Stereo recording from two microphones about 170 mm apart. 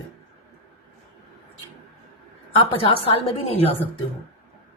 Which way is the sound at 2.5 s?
30° left (ahead or behind).